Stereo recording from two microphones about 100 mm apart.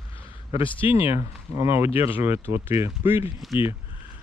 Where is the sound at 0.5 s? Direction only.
60° left (ahead or behind).